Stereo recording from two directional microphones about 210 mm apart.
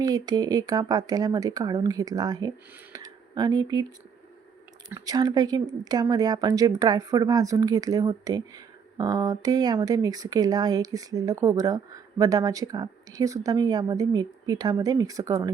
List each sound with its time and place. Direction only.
0.0 s speech: 15° right (ahead or behind)
2.9 s a sound: 20° right (ahead or behind)
4.9 s speech: 15° right (ahead or behind)